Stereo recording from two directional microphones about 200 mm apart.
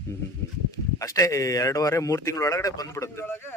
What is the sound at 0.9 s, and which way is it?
Speech, 15° left (ahead or behind).